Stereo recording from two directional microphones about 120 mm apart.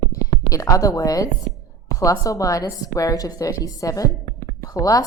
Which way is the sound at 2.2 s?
25° left (ahead or behind).